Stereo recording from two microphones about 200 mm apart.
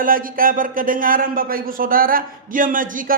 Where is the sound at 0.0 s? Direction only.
45° right (ahead or behind).